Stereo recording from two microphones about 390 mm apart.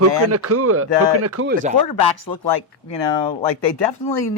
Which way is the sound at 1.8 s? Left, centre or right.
Left.